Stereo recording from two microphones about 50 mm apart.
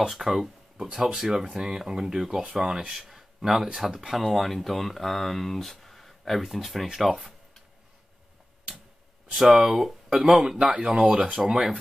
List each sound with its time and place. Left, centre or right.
0.1 s speech: centre
9.3 s speech: centre